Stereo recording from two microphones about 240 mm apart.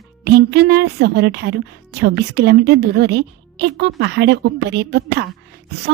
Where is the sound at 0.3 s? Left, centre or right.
Right.